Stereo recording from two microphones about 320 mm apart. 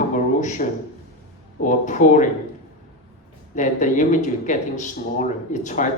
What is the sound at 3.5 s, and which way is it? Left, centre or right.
Speech, left.